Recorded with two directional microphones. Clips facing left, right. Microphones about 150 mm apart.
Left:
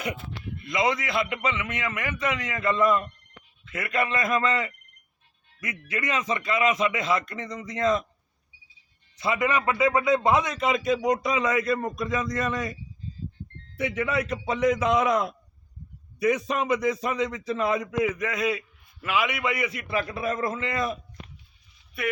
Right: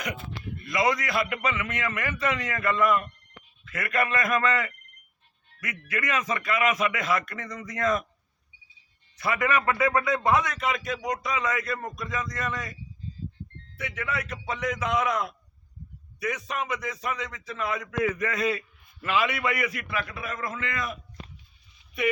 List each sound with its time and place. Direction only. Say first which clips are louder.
0.6 s a man's voice: even; 20° left (ahead or behind)
9.1 s a man's voice: left 1 dB; 20° left (ahead or behind)
13.7 s a man's voice: left 6 dB; 25° left (ahead or behind)